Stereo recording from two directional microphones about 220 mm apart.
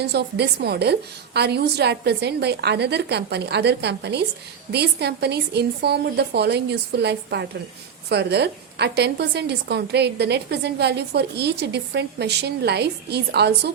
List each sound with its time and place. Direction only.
0.0 s a woman's voice: 50° right (ahead or behind)